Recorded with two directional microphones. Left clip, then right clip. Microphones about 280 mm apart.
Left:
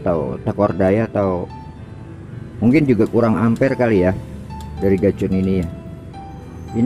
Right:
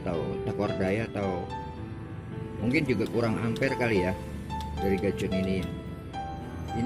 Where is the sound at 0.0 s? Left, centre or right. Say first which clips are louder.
Left 11 dB; centre.